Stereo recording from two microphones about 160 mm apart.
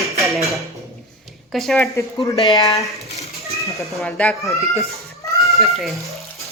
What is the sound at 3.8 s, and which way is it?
Speech, centre (ahead or behind).